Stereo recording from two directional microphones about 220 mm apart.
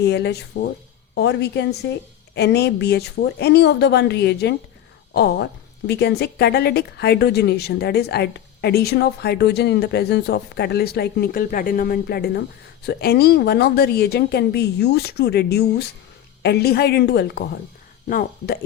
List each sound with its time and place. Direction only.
0.0 s a woman's voice: 50° left (ahead or behind)